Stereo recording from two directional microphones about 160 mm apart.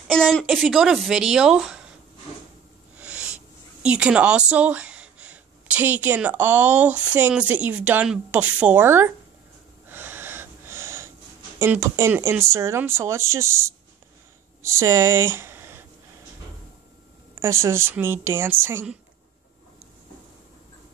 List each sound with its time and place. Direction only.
0.1 s speech: 5° left (ahead or behind)
3.0 s owl: 5° right (ahead or behind)
3.8 s speech: 5° right (ahead or behind)
9.8 s wheeze: 15° right (ahead or behind)
11.5 s speech: 15° right (ahead or behind)
17.4 s speech: 15° right (ahead or behind)